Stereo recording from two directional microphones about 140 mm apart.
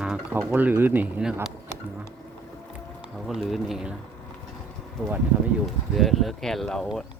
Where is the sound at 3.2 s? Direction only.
Centre (ahead or behind).